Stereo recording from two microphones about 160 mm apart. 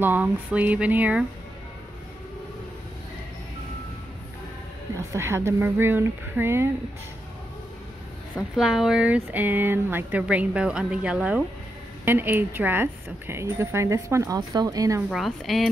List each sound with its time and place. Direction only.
0.0 s speech: 10° right (ahead or behind)
4.9 s speech: 15° right (ahead or behind)
8.4 s speech: centre (ahead or behind); by 15.0 s 20° right (ahead or behind)
15.0 s a woman's voice: centre (ahead or behind)